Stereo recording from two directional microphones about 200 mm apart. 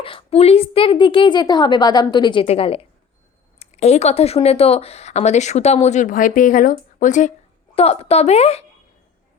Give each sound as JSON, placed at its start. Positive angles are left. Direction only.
{"t": 0.0, "sound": "a woman's voice", "side_deg": 25}